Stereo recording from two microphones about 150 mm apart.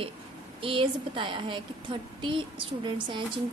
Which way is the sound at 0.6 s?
35° right (ahead or behind).